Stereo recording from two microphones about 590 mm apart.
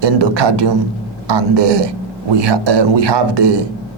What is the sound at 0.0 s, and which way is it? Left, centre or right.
A man's voice, right.